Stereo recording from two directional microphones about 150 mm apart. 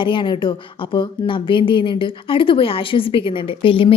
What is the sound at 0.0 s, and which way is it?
Speech, 35° left (ahead or behind).